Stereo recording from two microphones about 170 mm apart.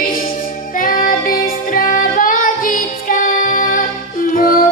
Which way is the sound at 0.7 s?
55° left (ahead or behind).